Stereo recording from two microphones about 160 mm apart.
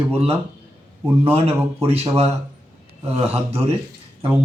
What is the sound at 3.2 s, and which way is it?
Speech, 40° right (ahead or behind).